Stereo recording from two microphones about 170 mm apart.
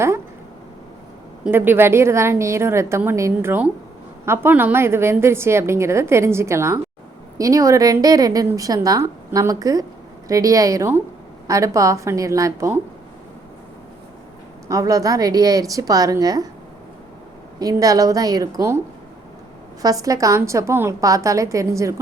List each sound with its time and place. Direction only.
1.5 s a woman's voice: 10° right (ahead or behind)
14.7 s a woman's voice: 20° right (ahead or behind)
17.6 s a woman's voice: 20° right (ahead or behind)
19.8 s a woman's voice: 20° right (ahead or behind)